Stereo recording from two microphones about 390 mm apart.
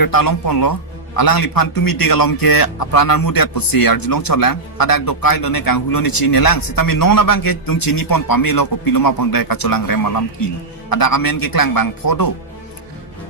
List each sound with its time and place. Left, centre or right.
0.0 s a man's voice: left